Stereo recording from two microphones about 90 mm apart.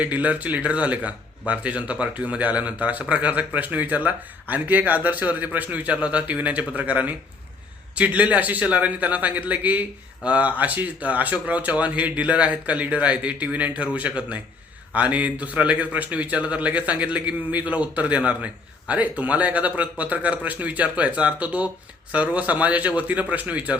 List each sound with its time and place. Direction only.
0.0 s speech: 15° right (ahead or behind)